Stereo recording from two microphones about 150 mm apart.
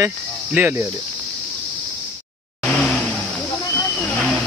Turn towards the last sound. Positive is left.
turn(degrees=5)  # may be behind; listen again after turning